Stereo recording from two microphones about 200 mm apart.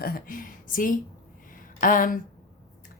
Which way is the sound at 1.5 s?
45° left (ahead or behind).